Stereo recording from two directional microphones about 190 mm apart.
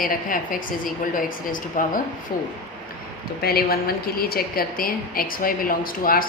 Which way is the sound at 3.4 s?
55° left (ahead or behind).